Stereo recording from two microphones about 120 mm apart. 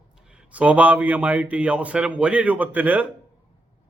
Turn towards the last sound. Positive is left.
turn(degrees=-15)  # may be behind; listen again after turning